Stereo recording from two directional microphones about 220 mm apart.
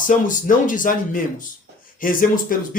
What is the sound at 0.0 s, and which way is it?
Speech, 35° left (ahead or behind).